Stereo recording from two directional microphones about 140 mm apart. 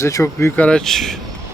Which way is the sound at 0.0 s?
20° left (ahead or behind).